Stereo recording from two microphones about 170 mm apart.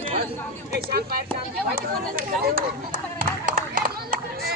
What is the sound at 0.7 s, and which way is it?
Speech, 70° right (ahead or behind).